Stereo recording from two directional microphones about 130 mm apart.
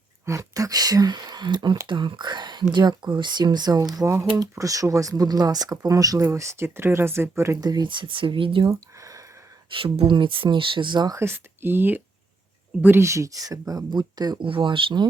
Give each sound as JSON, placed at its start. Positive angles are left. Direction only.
{"t": 0.3, "sound": "speech", "side_deg": -25}
{"t": 8.7, "sound": "a sound", "side_deg": -25}
{"t": 9.7, "sound": "speech", "side_deg": -45}
{"t": 11.2, "sound": "speech", "side_deg": -20}